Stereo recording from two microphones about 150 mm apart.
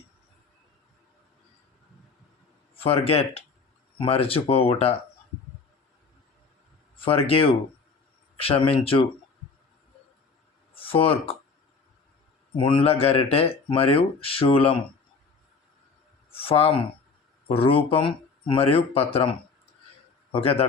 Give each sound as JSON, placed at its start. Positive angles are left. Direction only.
{"t": 2.7, "sound": "speech", "side_deg": 40}
{"t": 7.0, "sound": "speech", "side_deg": 40}
{"t": 10.8, "sound": "speech", "side_deg": 40}
{"t": 12.5, "sound": "speech", "side_deg": 35}
{"t": 16.3, "sound": "a sound", "side_deg": 40}
{"t": 17.5, "sound": "speech", "side_deg": 40}
{"t": 20.3, "sound": "speech", "side_deg": 40}